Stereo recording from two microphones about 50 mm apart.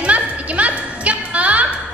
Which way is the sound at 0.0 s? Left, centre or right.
Right.